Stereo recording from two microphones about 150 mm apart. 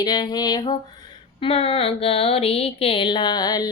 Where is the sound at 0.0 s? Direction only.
30° left (ahead or behind).